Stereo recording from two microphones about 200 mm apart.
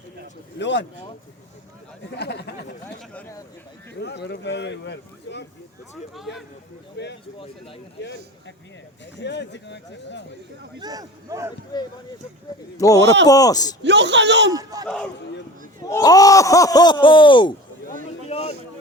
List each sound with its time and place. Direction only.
0.6 s speech: 60° left (ahead or behind)
2.1 s speech: 55° left (ahead or behind)
3.0 s speech: 5° left (ahead or behind)
3.9 s speech: 55° left (ahead or behind)
7.0 s speech: 60° left (ahead or behind)
7.3 s speech: 30° left (ahead or behind)
8.0 s speech: 65° left (ahead or behind)
10.8 s speech: 20° right (ahead or behind)
12.8 s speech: 15° left (ahead or behind)
13.8 s a man's voice: 60° right (ahead or behind)
14.5 s speech: 20° right (ahead or behind)
15.8 s speech: 15° left (ahead or behind)